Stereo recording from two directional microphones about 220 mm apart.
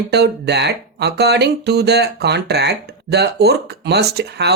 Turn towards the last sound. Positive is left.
turn(degrees=-50)  # may be behind; listen again after turning